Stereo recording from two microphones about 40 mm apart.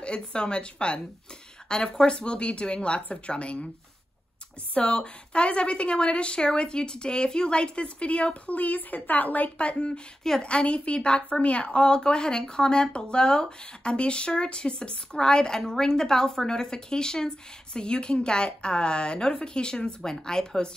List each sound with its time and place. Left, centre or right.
0.0 s a woman's voice: left
4.7 s a woman's voice: left